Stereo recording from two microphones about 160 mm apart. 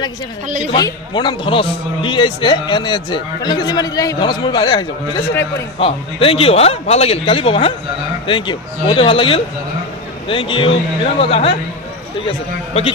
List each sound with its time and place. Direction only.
0.7 s a man's voice: 25° left (ahead or behind)